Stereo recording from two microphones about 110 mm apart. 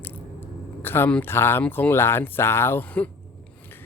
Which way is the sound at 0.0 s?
15° left (ahead or behind).